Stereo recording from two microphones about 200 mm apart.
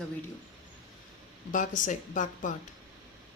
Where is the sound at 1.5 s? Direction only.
40° left (ahead or behind).